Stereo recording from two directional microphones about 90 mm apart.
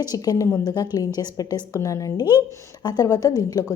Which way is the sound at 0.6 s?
50° left (ahead or behind).